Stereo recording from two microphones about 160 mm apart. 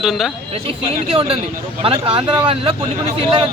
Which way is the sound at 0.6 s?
35° right (ahead or behind).